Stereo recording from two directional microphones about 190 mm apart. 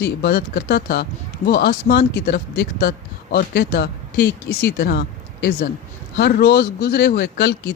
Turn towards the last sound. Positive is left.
turn(degrees=65)  # may be behind; listen again after turning